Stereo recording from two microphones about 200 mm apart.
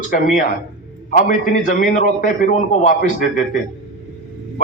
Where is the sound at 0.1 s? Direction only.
40° left (ahead or behind).